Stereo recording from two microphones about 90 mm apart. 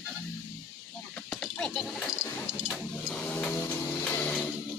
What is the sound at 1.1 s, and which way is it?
Horse, 10° left (ahead or behind).